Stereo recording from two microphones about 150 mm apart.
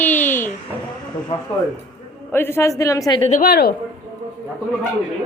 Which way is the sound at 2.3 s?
15° left (ahead or behind).